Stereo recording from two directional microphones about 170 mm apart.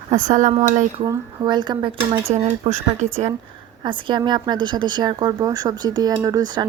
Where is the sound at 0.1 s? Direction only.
45° right (ahead or behind).